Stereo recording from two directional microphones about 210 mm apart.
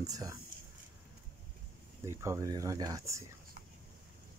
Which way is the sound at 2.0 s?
15° right (ahead or behind).